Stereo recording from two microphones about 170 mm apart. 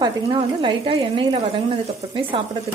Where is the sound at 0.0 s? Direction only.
25° right (ahead or behind).